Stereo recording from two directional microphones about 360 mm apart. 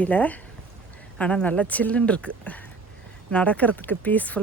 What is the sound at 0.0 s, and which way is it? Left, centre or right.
Speech, centre.